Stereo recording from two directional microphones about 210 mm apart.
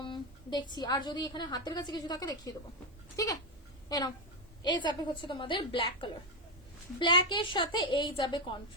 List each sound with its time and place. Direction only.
0.0 s a woman's voice: 20° left (ahead or behind)
3.8 s a woman's voice: 20° left (ahead or behind)